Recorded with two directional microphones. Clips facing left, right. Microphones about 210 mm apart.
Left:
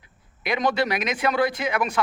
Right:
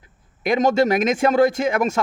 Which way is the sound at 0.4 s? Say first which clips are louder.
Right 6 dB; 45° right (ahead or behind).